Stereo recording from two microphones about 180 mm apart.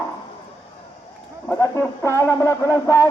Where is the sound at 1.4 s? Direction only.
15° left (ahead or behind).